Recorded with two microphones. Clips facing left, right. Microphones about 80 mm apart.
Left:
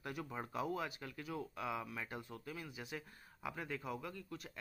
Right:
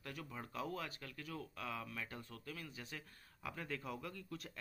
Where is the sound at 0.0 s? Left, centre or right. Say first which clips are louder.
Left 5 dB; centre.